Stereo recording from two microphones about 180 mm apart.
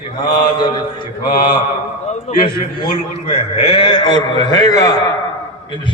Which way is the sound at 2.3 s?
35° left (ahead or behind).